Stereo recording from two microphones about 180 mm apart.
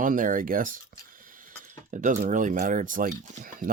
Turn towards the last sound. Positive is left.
turn(degrees=-50)  # may be behind; listen again after turning